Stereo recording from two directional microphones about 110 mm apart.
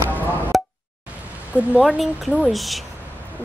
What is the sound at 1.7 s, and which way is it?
Speech, centre (ahead or behind).